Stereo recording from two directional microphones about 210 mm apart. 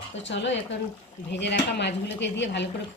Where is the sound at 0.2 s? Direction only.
60° left (ahead or behind).